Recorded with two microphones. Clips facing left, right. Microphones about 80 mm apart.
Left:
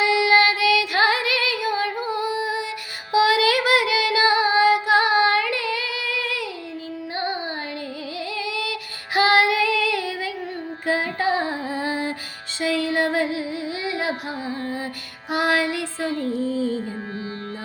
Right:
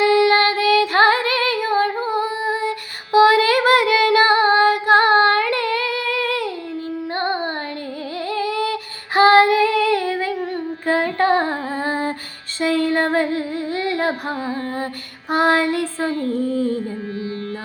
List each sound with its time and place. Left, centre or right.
0.0 s female singing: right
7.2 s music: right
8.3 s female singing: right